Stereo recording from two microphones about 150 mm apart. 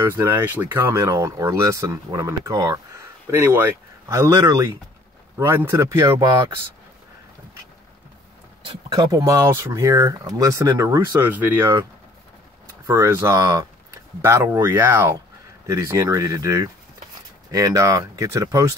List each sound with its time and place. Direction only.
0.0 s speech: 15° right (ahead or behind)
8.6 s speech: 30° right (ahead or behind); by 11.7 s 10° right (ahead or behind)
12.8 s speech: 20° right (ahead or behind)